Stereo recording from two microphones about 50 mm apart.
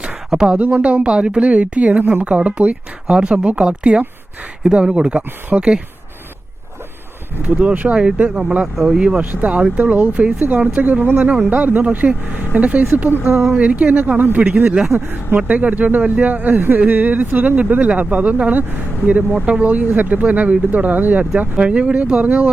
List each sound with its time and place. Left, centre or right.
0.0 s a sound: centre
0.6 s speech: right
7.4 s speech: right
9.2 s speech: right
14.6 s speech: centre
14.9 s speech: right
15.4 s speech: right